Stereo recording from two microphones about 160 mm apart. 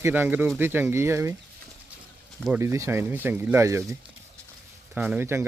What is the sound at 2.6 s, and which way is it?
Speech, 15° right (ahead or behind).